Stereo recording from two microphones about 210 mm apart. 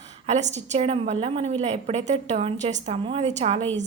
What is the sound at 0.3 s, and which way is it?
A woman's voice, 35° right (ahead or behind).